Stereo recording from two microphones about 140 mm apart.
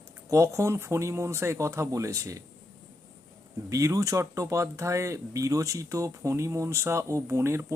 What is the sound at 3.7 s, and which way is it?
Speech, 25° right (ahead or behind).